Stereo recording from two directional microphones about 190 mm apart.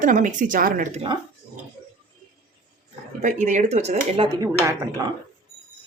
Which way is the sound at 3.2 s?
40° right (ahead or behind).